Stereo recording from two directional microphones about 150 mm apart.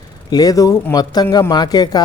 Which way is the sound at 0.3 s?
25° left (ahead or behind).